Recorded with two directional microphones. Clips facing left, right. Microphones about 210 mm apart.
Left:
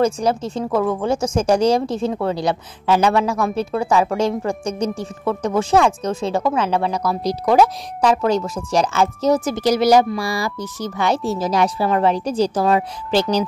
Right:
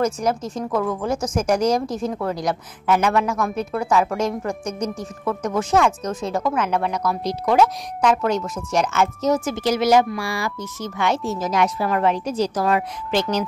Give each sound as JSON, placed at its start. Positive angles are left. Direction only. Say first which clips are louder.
{"t": 0.0, "sound": "speech", "louder": "left 3 dB", "side_deg": 30}